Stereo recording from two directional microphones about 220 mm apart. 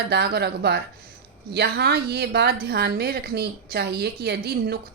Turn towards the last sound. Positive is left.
turn(degrees=-45)  # may be behind; listen again after turning